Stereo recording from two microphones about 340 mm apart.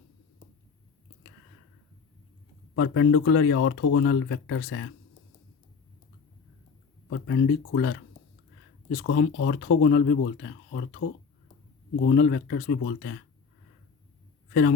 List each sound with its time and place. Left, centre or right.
2.7 s speech: left
7.1 s speech: left